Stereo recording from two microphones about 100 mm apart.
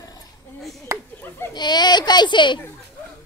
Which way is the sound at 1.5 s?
45° left (ahead or behind).